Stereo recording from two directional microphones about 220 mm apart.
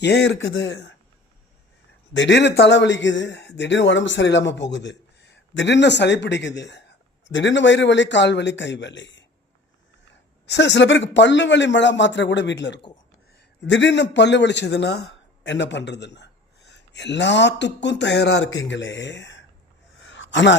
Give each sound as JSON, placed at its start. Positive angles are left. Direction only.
{"t": 0.0, "sound": "a man's voice", "side_deg": 50}
{"t": 2.1, "sound": "a man's voice", "side_deg": 55}
{"t": 10.4, "sound": "a man's voice", "side_deg": 50}
{"t": 20.1, "sound": "a sound", "side_deg": 55}